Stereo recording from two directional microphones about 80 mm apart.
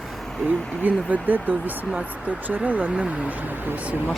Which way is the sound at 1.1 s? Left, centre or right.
Right.